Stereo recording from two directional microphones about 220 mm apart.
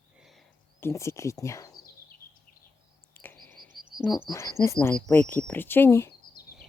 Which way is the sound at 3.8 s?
45° right (ahead or behind).